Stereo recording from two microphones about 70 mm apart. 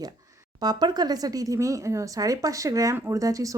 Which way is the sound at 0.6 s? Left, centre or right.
Right.